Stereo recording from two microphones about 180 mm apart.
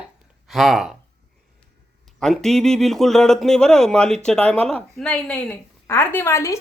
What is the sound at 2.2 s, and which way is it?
A woman's voice, centre (ahead or behind).